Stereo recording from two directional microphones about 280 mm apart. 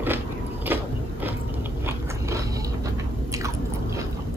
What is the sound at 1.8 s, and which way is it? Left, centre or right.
Biting, centre.